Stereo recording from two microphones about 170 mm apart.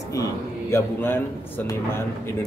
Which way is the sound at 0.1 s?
20° left (ahead or behind).